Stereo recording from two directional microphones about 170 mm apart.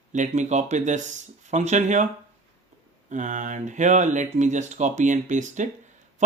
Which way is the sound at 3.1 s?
45° right (ahead or behind).